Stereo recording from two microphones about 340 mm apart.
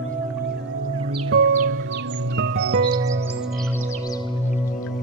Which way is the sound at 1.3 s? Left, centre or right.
Right.